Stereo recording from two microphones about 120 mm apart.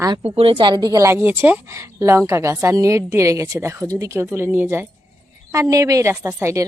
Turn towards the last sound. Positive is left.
turn(degrees=-25)  # may be behind; listen again after turning